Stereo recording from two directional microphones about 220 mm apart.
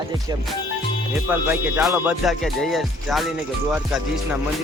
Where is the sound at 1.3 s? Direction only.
5° right (ahead or behind).